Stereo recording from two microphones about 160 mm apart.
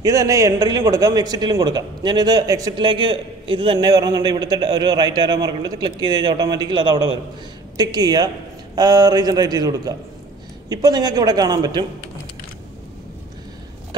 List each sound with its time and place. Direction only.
0.0 s a man's voice: 20° right (ahead or behind)